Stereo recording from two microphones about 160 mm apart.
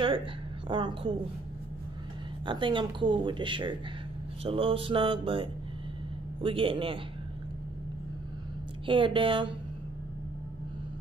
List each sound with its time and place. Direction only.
0.0 s a woman's voice: 30° right (ahead or behind)
2.4 s speech: 30° right (ahead or behind)
4.5 s mantra: 35° right (ahead or behind)
8.8 s mantra: 30° right (ahead or behind)